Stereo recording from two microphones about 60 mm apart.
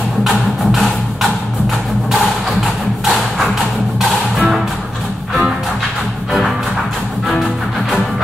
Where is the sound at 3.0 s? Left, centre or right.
Centre.